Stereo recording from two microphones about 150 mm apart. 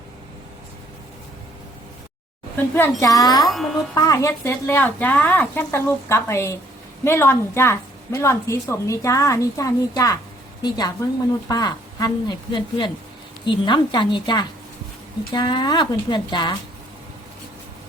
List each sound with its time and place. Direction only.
2.7 s a woman's voice: 20° left (ahead or behind)
3.4 s a child's voice: centre (ahead or behind)
3.9 s a woman's voice: 20° left (ahead or behind)